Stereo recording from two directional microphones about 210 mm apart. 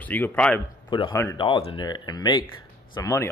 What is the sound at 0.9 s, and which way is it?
Speech, 20° left (ahead or behind).